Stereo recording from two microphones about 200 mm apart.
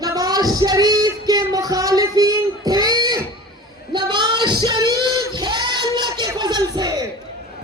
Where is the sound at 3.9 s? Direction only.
20° right (ahead or behind).